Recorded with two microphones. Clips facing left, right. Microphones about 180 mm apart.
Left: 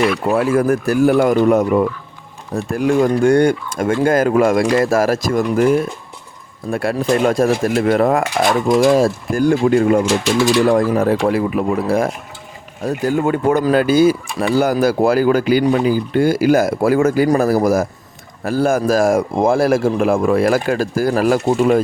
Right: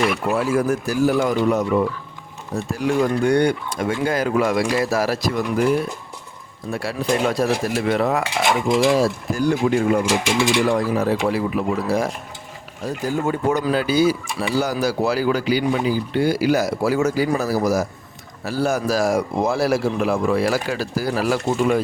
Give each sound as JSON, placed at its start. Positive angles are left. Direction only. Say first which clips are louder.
{"t": 0.3, "sound": "speech", "louder": "left 6 dB", "side_deg": 55}
{"t": 6.7, "sound": "speech", "louder": "left 5 dB", "side_deg": 55}